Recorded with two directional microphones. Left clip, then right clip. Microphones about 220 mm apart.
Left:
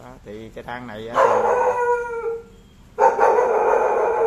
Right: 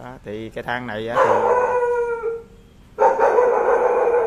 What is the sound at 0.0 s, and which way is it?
Speech, 30° right (ahead or behind).